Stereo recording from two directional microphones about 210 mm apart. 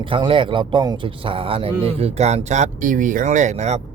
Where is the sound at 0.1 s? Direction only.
25° right (ahead or behind).